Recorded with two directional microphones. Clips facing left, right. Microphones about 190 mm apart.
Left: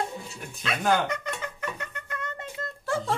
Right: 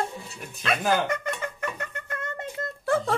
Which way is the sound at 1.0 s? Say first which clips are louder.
Right 3 dB; 50° right (ahead or behind).